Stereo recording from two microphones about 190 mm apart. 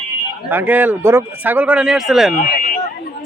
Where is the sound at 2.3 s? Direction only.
40° left (ahead or behind).